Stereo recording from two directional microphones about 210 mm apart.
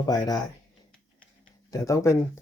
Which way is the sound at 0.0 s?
20° left (ahead or behind).